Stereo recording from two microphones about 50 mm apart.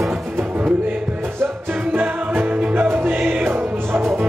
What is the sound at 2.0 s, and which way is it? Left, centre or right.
Music, right.